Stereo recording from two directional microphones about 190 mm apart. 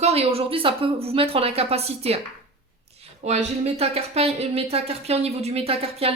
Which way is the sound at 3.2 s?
35° right (ahead or behind).